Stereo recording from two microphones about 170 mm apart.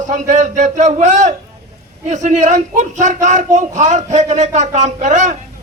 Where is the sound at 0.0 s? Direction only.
45° right (ahead or behind).